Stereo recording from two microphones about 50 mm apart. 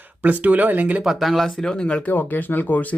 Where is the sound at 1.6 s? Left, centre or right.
Centre.